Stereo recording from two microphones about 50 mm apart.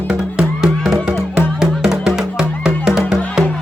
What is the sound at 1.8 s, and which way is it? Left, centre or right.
Music, centre.